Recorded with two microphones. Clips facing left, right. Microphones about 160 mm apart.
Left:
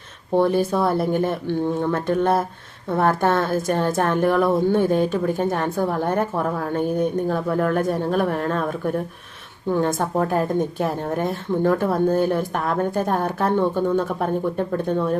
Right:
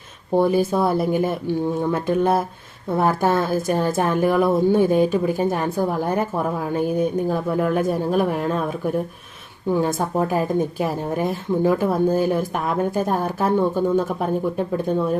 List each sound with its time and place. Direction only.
0.3 s a woman's voice: 5° right (ahead or behind)